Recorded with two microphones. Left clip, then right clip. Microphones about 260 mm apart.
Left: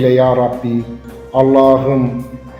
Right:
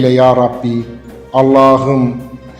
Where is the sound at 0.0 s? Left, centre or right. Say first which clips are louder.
Right 2 dB; right.